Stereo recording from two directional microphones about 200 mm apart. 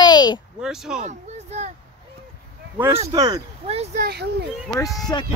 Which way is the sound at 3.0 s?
20° right (ahead or behind).